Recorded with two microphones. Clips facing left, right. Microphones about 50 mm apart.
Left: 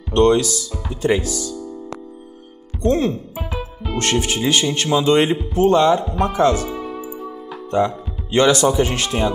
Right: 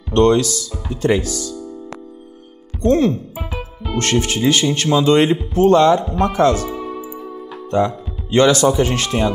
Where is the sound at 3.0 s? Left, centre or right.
Left.